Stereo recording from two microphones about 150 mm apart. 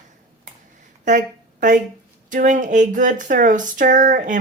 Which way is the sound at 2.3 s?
60° right (ahead or behind).